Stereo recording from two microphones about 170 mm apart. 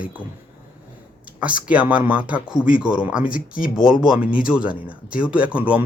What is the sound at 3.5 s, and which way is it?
Speech, 55° left (ahead or behind).